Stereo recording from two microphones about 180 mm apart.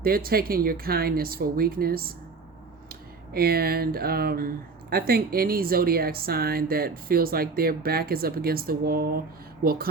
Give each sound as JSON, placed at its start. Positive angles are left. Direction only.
{"t": 0.0, "sound": "speech", "side_deg": -55}